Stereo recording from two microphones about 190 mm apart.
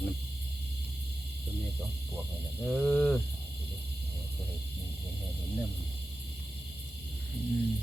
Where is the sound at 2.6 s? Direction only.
5° left (ahead or behind).